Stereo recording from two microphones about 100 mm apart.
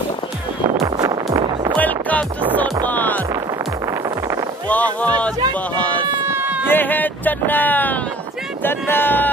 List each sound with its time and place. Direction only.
0.8 s music: 40° right (ahead or behind)
1.8 s music: 15° left (ahead or behind)
4.6 s speech: 15° left (ahead or behind)
5.8 s a sound: 15° left (ahead or behind)
6.2 s baby cry: 20° right (ahead or behind)
6.7 s a sound: 20° left (ahead or behind)